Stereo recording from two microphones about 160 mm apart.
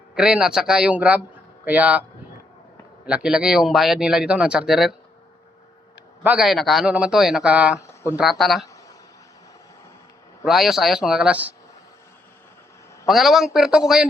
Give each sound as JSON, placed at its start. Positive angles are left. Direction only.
{"t": 0.1, "sound": "speech", "side_deg": -5}
{"t": 3.1, "sound": "speech", "side_deg": -5}
{"t": 6.2, "sound": "speech", "side_deg": -5}
{"t": 7.8, "sound": "a sound", "side_deg": 15}
{"t": 8.1, "sound": "speech", "side_deg": 0}
{"t": 10.4, "sound": "speech", "side_deg": 0}
{"t": 13.1, "sound": "speech", "side_deg": 0}